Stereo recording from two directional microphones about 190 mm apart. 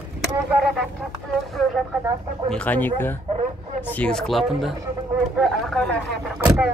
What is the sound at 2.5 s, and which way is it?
Speech, 10° left (ahead or behind).